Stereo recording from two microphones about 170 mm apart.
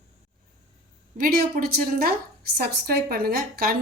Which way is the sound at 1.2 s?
60° right (ahead or behind).